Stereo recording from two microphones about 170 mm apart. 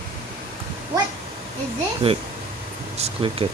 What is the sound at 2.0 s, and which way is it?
Speech, 30° right (ahead or behind).